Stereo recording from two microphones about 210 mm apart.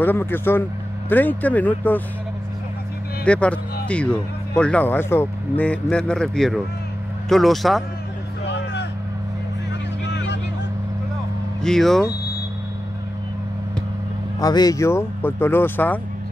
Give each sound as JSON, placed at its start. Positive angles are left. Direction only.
{"t": 0.0, "sound": "speech", "side_deg": 10}
{"t": 3.3, "sound": "speech", "side_deg": 5}
{"t": 8.5, "sound": "vehicle", "side_deg": 55}
{"t": 10.0, "sound": "vehicle", "side_deg": 55}
{"t": 11.6, "sound": "speech", "side_deg": 0}
{"t": 14.4, "sound": "speech", "side_deg": 20}